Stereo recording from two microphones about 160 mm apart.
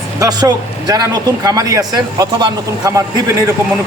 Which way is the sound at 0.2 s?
20° right (ahead or behind).